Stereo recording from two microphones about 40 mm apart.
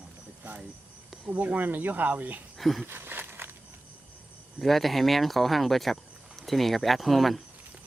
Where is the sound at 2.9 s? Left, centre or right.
Right.